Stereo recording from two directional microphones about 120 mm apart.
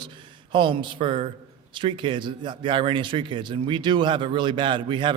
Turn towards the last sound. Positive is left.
turn(degrees=-45)  # may be behind; listen again after turning